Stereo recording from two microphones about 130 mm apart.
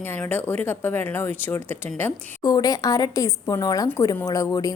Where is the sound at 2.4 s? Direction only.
30° left (ahead or behind).